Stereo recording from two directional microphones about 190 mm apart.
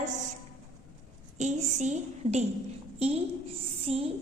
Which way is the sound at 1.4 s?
35° right (ahead or behind).